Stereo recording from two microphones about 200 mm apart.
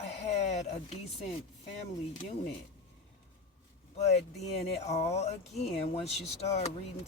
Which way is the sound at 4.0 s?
35° left (ahead or behind).